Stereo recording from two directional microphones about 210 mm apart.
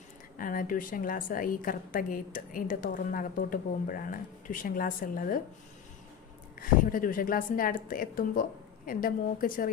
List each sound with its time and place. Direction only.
0.3 s a woman's voice: 40° left (ahead or behind)
6.6 s a woman's voice: 40° left (ahead or behind)